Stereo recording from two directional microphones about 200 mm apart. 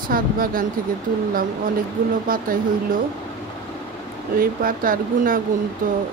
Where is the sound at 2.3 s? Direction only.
45° right (ahead or behind).